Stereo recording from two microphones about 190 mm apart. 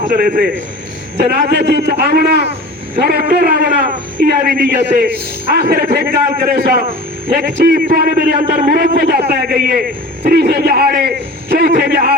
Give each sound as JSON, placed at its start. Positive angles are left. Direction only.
{"t": 0.2, "sound": "a man's voice", "side_deg": -50}